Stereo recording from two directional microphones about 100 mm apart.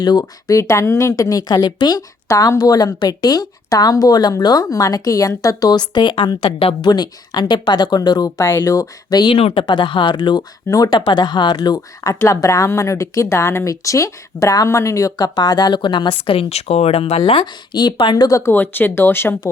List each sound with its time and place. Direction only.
0.0 s a woman's voice: 45° left (ahead or behind)
2.2 s a woman's voice: 30° left (ahead or behind); by 6.7 s 65° left (ahead or behind)
6.8 s speech: 45° left (ahead or behind)
8.4 s a woman's voice: 25° left (ahead or behind)
9.3 s speech: 70° left (ahead or behind)
9.6 s speech: 50° left (ahead or behind); by 18.5 s 35° left (ahead or behind)
18.5 s speech: 20° left (ahead or behind)